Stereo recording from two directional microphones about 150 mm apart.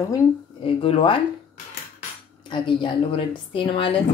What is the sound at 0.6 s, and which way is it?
Speech, 35° left (ahead or behind).